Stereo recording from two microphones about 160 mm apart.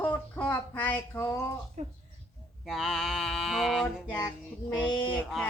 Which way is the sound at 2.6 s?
Centre (ahead or behind).